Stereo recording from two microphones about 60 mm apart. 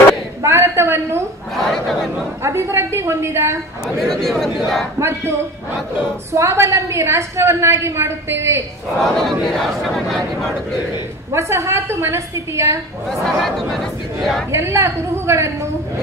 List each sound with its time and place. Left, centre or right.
0.4 s a sound: right
1.6 s speech: centre
2.4 s a woman's voice: right
4.0 s speech: centre
4.9 s a woman's voice: right
6.3 s a woman's voice: right
9.0 s speech: centre
11.3 s a woman's voice: right
13.4 s speech: centre
14.5 s a woman's voice: right